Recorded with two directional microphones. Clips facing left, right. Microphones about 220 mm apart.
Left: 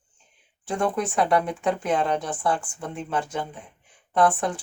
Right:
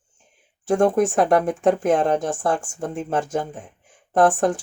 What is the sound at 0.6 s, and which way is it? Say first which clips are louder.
Speech: right 8 dB; 45° right (ahead or behind).